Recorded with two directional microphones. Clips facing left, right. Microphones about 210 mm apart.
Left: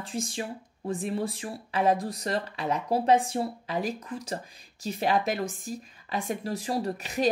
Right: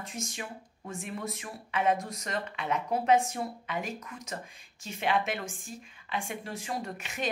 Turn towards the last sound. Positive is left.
turn(degrees=35)  # may be behind; listen again after turning